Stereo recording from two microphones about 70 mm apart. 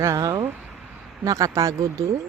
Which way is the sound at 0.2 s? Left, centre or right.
Right.